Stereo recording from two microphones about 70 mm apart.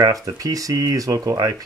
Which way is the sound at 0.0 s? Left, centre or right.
Right.